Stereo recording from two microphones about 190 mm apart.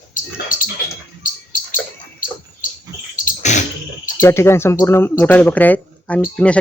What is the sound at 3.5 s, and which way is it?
Bird, 35° left (ahead or behind).